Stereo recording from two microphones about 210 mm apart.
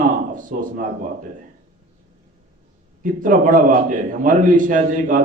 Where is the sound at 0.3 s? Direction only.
40° right (ahead or behind).